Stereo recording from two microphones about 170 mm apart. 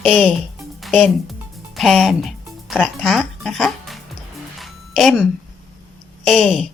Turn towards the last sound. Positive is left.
turn(degrees=0)  # may be behind; listen again after turning